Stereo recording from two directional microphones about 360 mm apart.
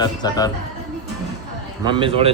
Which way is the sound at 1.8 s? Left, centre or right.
Centre.